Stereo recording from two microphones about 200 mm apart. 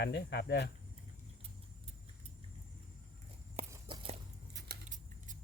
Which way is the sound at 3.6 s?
30° right (ahead or behind).